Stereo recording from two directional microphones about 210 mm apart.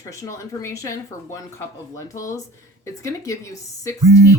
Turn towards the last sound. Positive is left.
turn(degrees=15)  # may be behind; listen again after turning